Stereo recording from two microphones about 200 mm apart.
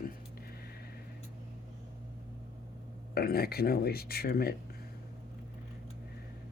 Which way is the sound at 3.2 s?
50° left (ahead or behind).